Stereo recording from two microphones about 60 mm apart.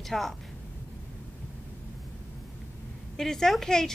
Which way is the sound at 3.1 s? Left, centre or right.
Centre.